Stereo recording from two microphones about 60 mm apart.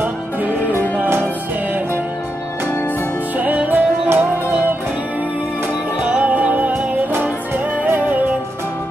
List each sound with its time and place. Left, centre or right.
3.3 s music: right
5.9 s music: right